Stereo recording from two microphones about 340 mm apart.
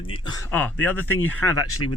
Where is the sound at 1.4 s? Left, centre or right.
Left.